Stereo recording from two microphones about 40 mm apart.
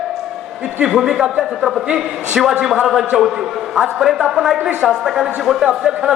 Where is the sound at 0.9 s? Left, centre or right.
Centre.